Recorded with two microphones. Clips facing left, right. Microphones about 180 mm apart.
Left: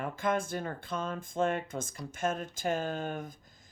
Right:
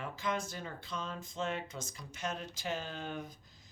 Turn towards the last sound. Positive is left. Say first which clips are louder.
# left 6 dB
turn(degrees=50)  # may be behind; listen again after turning